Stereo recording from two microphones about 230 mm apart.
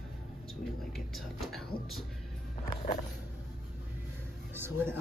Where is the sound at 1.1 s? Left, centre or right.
Centre.